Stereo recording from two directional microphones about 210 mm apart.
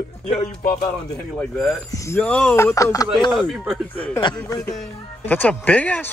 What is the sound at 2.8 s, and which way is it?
Speech, 15° left (ahead or behind).